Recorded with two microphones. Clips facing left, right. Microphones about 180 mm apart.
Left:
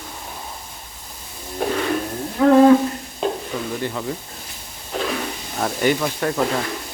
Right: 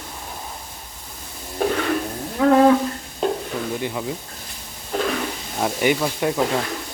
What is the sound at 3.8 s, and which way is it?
Speech, 10° right (ahead or behind).